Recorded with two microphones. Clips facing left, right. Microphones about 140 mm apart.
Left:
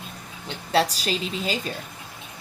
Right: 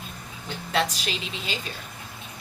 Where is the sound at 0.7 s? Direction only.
35° left (ahead or behind).